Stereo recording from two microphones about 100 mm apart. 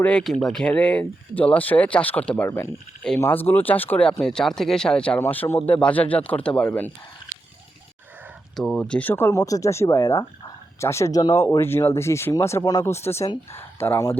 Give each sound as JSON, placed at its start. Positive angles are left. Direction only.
{"t": 0.0, "sound": "speech", "side_deg": 10}
{"t": 2.5, "sound": "speech", "side_deg": 25}
{"t": 5.2, "sound": "speech", "side_deg": 20}
{"t": 8.5, "sound": "speech", "side_deg": 10}
{"t": 11.6, "sound": "speech", "side_deg": 25}